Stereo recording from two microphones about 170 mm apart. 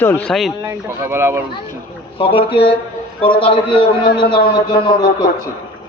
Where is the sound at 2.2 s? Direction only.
30° left (ahead or behind).